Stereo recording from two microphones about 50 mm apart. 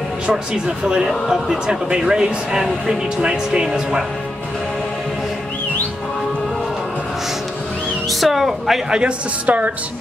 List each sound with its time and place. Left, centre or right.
0.3 s speech: centre
8.1 s music: centre
8.9 s a woman's voice: right